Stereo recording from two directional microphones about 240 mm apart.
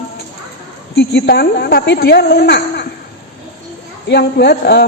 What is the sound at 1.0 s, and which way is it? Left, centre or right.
A woman's voice, left.